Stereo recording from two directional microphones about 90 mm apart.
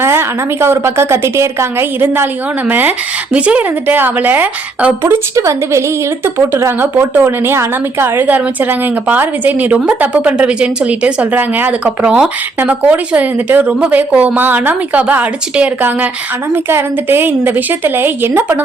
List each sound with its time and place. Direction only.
0.0 s a woman's voice: 25° right (ahead or behind)
2.6 s a woman's voice: 20° right (ahead or behind)
5.4 s a woman's voice: 30° right (ahead or behind)